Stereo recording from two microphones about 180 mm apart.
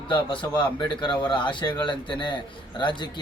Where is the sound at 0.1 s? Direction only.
25° left (ahead or behind).